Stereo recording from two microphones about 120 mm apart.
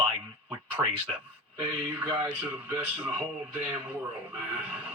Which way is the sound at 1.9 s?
15° right (ahead or behind).